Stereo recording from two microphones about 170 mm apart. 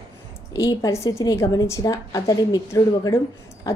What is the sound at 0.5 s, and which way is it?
A woman's voice, 20° left (ahead or behind).